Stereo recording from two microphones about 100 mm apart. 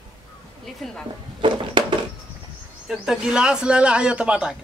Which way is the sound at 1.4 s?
55° right (ahead or behind).